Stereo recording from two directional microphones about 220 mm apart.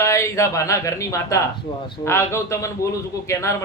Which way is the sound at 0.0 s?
15° left (ahead or behind).